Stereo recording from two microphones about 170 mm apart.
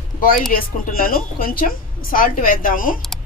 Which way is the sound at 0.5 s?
60° left (ahead or behind).